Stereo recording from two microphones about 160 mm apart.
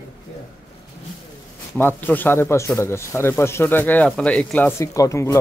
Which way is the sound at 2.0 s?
10° left (ahead or behind).